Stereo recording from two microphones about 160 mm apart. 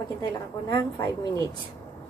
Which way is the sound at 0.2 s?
25° left (ahead or behind).